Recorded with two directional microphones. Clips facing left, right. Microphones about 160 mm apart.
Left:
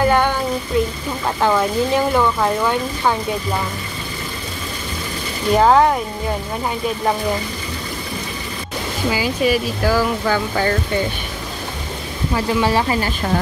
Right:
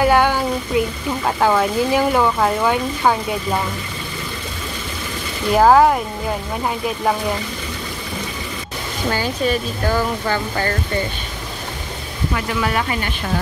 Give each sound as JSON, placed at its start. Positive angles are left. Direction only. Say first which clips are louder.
{"t": 0.0, "sound": "speech", "louder": "right 1 dB", "side_deg": -10}
{"t": 5.5, "sound": "speech", "louder": "right 1 dB", "side_deg": -5}
{"t": 9.1, "sound": "speech", "louder": "left 2 dB", "side_deg": 10}
{"t": 12.4, "sound": "speech", "louder": "left 5 dB", "side_deg": 30}